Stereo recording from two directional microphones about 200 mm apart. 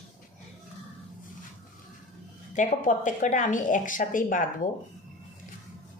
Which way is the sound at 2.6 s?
40° left (ahead or behind).